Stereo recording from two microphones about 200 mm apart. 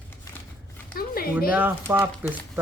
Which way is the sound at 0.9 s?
45° left (ahead or behind).